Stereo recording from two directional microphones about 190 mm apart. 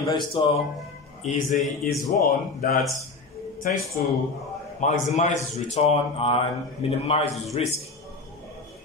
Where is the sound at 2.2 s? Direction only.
50° left (ahead or behind).